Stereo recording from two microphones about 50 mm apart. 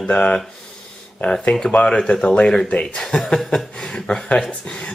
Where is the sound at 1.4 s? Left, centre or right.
Left.